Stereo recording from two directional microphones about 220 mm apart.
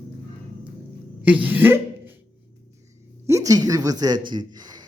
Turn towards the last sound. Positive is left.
turn(degrees=-20)  # may be behind; listen again after turning